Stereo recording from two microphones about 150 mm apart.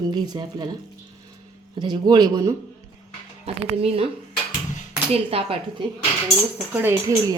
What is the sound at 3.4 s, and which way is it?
Speech, 45° right (ahead or behind).